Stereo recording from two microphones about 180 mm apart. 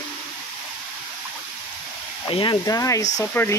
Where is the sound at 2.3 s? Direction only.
25° left (ahead or behind); by 3.5 s 10° left (ahead or behind).